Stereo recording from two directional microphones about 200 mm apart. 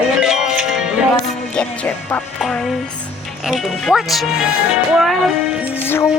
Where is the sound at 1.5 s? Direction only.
5° left (ahead or behind).